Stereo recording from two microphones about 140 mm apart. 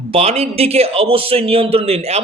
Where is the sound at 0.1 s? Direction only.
45° right (ahead or behind).